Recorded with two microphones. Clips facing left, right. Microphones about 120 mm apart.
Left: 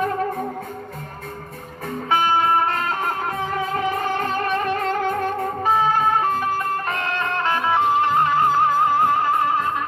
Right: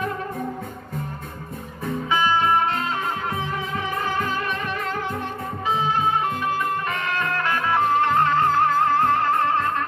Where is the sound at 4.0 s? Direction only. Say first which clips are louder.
Left 2 dB; 60° left (ahead or behind).